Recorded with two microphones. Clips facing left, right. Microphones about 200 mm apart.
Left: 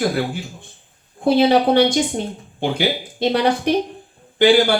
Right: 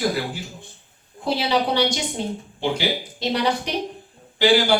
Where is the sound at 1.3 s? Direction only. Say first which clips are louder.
Left 8 dB; 55° left (ahead or behind).